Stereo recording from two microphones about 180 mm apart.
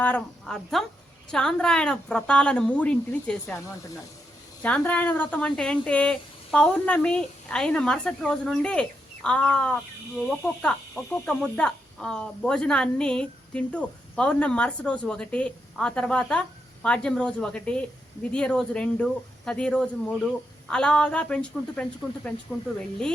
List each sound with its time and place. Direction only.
0.0 s speech: 5° left (ahead or behind)
4.6 s speech: 10° left (ahead or behind)